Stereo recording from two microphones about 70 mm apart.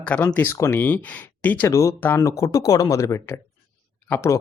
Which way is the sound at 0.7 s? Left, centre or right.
Left.